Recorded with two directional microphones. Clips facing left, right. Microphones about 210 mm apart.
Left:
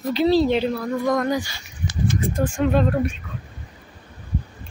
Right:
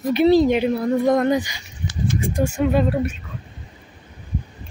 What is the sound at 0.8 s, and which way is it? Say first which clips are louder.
Speech: right 4 dB; 25° right (ahead or behind).